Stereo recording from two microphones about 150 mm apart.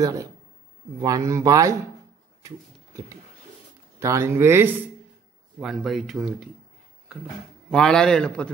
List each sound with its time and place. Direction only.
0.0 s speech: 20° right (ahead or behind)
2.4 s a sound: 20° right (ahead or behind)
4.0 s speech: 20° right (ahead or behind)
5.6 s speech: centre (ahead or behind)
7.7 s speech: 5° left (ahead or behind)